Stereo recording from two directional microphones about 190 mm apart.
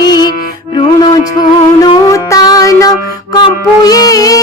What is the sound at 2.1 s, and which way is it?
Music, 20° left (ahead or behind).